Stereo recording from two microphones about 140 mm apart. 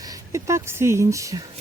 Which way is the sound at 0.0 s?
25° right (ahead or behind).